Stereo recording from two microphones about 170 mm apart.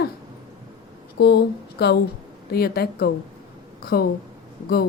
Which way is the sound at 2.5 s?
65° left (ahead or behind).